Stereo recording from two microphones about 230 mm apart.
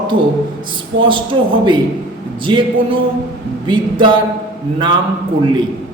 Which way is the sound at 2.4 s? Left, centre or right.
Right.